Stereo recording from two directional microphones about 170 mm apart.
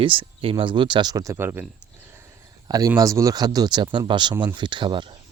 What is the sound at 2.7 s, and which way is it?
Speech, 20° right (ahead or behind).